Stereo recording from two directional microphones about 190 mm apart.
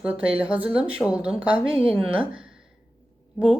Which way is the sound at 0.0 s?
5° right (ahead or behind).